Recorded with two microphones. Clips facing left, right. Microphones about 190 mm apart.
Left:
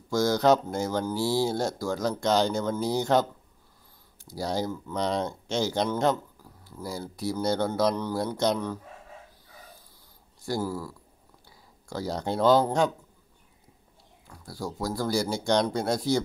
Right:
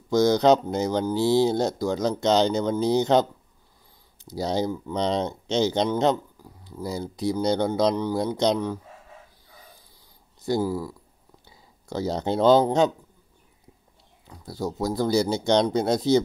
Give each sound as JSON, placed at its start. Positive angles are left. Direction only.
{"t": 0.1, "sound": "speech", "side_deg": -20}
{"t": 10.4, "sound": "speech", "side_deg": -20}
{"t": 14.2, "sound": "speech", "side_deg": -20}